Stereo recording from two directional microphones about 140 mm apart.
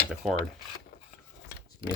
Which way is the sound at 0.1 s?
5° right (ahead or behind).